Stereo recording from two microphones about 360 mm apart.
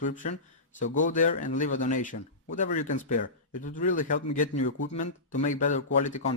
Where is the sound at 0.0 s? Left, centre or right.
Left.